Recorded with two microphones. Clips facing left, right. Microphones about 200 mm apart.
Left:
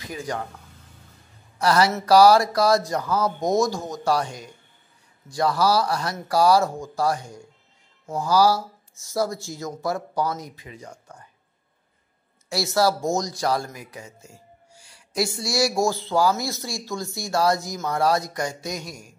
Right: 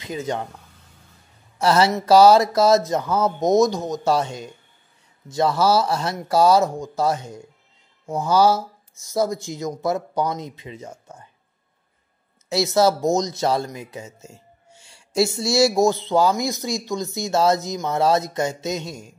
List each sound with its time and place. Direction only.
0.0 s speech: 25° right (ahead or behind)
1.6 s speech: 25° right (ahead or behind)
12.4 s speech: 20° right (ahead or behind)